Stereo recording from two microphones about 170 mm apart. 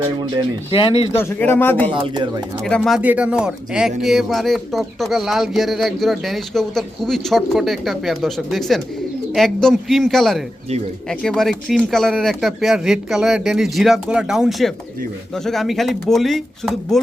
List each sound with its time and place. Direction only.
0.7 s speech: 30° left (ahead or behind)
1.1 s speech: 15° left (ahead or behind)
1.9 s speech: 25° right (ahead or behind)
2.6 s speech: 5° left (ahead or behind)
3.0 s speech: 10° right (ahead or behind)